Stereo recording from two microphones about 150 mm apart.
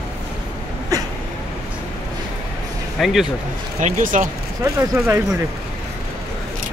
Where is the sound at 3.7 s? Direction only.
55° right (ahead or behind).